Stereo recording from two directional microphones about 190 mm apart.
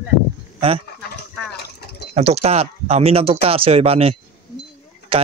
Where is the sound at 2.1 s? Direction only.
35° right (ahead or behind).